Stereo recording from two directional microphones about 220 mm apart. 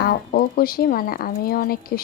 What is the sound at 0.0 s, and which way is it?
A woman's voice, 45° left (ahead or behind).